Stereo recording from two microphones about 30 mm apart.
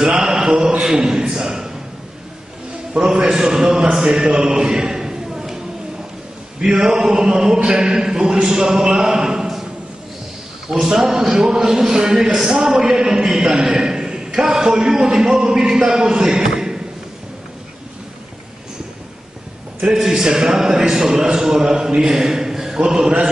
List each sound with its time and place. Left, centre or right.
0.2 s a sound: right
3.2 s a man's voice: right
6.6 s a man's voice: right
10.8 s a man's voice: right
20.0 s a man's voice: centre
22.2 s a sound: centre
22.8 s a man's voice: right